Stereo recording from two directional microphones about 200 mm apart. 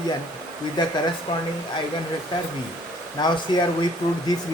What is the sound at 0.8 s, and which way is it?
Speech, 20° left (ahead or behind).